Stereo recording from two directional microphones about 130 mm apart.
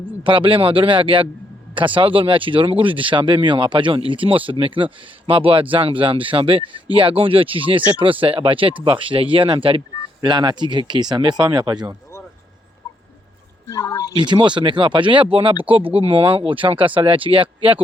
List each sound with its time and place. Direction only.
0.2 s speech: 40° right (ahead or behind)
10.2 s speech: 35° right (ahead or behind)
13.7 s speech: 25° left (ahead or behind)
14.2 s speech: 35° right (ahead or behind)